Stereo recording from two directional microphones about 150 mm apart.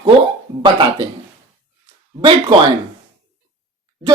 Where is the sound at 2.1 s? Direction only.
35° right (ahead or behind).